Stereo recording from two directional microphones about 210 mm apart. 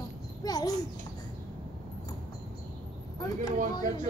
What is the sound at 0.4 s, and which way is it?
Babbling, 20° left (ahead or behind).